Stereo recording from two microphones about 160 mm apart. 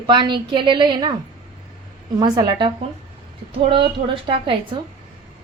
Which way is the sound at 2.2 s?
25° right (ahead or behind).